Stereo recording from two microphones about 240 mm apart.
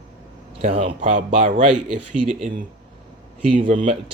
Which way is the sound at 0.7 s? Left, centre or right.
Right.